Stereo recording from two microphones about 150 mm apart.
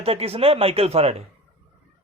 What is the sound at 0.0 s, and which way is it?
Speech, 40° right (ahead or behind).